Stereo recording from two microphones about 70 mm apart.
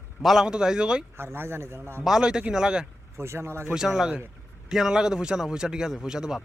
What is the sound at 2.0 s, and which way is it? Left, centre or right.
Speech, centre.